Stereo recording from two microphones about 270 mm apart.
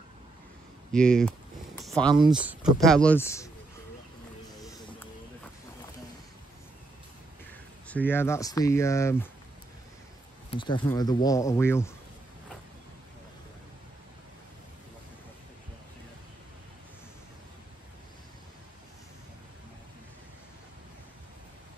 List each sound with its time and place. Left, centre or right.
0.9 s speech: centre
1.8 s a sound: centre
2.4 s speech: centre
7.9 s speech: centre
10.5 s speech: centre